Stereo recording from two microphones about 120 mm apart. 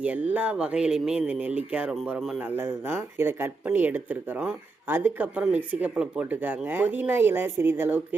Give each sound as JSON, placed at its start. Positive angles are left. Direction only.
{"t": 0.0, "sound": "speech", "side_deg": -10}
{"t": 2.4, "sound": "speech", "side_deg": -15}